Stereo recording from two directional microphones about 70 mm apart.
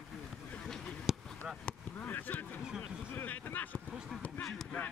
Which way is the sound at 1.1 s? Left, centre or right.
Centre.